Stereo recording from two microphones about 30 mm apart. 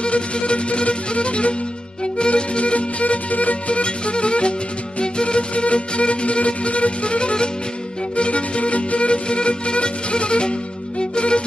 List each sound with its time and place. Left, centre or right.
0.0 s music: left